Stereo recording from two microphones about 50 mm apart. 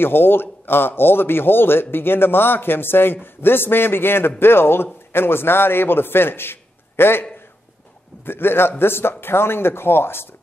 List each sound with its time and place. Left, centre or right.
0.0 s a man's voice: left
8.3 s a man's voice: left